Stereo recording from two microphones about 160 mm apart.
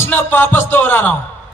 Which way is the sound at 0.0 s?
15° left (ahead or behind).